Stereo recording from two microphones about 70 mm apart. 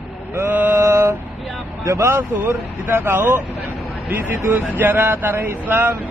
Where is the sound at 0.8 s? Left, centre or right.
Right.